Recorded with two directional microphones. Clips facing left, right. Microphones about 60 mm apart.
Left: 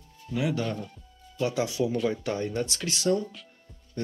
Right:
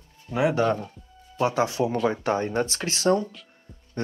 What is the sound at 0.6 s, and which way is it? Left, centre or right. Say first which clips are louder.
Speech: right 8 dB; right.